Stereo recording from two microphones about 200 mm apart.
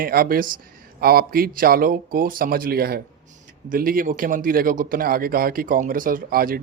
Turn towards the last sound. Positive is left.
turn(degrees=-45)  # may be behind; listen again after turning